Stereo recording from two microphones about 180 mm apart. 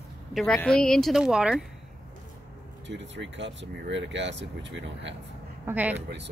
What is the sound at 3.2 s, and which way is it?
Speech, 85° right.